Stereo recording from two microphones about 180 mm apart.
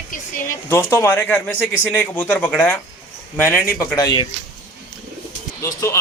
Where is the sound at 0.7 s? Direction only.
15° left (ahead or behind).